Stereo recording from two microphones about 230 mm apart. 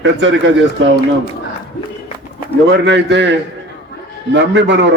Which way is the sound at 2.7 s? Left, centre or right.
Right.